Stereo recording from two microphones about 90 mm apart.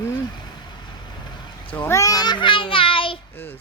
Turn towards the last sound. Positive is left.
turn(degrees=25)  # may be behind; listen again after turning